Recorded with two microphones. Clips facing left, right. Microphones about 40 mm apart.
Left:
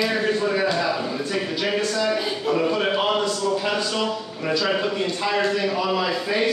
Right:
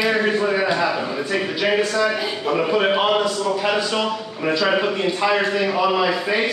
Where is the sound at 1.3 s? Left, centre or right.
Right.